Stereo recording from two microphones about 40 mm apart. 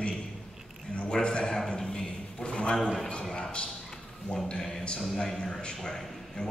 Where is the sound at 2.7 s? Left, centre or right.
Centre.